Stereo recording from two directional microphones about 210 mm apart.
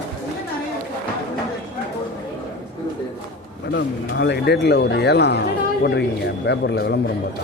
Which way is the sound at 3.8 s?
55° left (ahead or behind).